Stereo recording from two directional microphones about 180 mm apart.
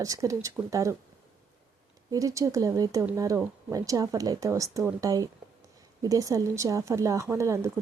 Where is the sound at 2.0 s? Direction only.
20° right (ahead or behind).